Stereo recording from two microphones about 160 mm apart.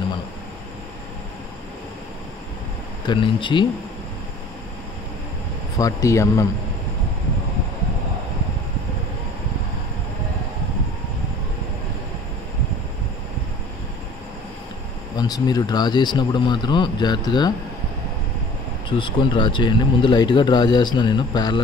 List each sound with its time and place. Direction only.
3.1 s speech: 30° left (ahead or behind)
5.8 s speech: 20° left (ahead or behind)
15.1 s speech: 25° left (ahead or behind)
18.9 s speech: 30° left (ahead or behind)